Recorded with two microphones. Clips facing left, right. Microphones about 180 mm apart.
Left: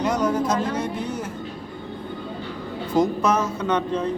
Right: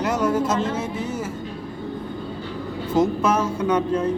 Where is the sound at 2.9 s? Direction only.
5° right (ahead or behind).